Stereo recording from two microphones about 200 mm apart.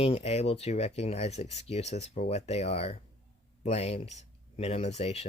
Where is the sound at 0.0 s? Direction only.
30° left (ahead or behind).